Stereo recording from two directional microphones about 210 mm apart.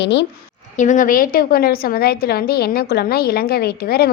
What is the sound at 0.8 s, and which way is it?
A woman's voice, 35° left (ahead or behind).